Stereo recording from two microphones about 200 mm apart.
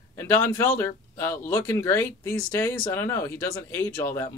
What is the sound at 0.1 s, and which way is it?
Speech, 10° left (ahead or behind).